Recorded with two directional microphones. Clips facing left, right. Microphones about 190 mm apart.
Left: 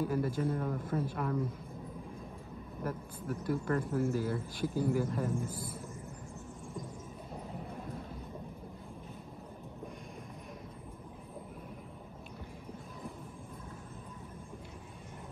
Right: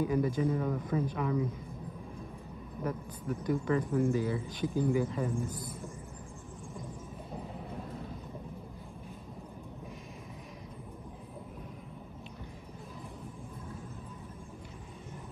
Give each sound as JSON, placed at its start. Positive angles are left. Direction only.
{"t": 0.0, "sound": "speech", "side_deg": 5}
{"t": 2.8, "sound": "speech", "side_deg": 5}